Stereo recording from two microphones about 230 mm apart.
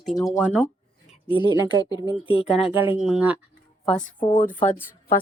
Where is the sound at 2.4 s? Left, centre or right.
Centre.